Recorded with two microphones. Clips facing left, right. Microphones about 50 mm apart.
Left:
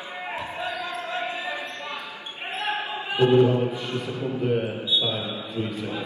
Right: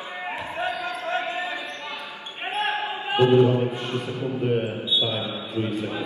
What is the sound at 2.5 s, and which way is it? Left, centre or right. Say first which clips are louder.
Basketball bounce: right 2 dB; right.